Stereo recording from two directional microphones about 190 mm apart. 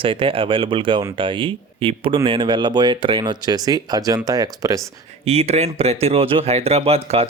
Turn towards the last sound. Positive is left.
turn(degrees=-30)  # may be behind; listen again after turning